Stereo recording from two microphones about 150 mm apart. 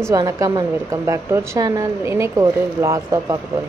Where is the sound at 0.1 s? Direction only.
25° right (ahead or behind).